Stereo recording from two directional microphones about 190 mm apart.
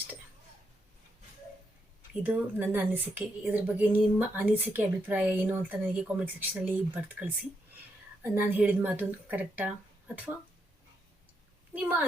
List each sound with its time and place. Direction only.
2.2 s a woman's voice: 10° right (ahead or behind)
11.7 s a woman's voice: 10° right (ahead or behind)